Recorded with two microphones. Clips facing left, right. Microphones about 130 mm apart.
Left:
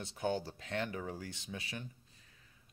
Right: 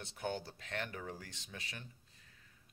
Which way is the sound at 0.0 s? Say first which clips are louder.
Left 5 dB; 15° left (ahead or behind).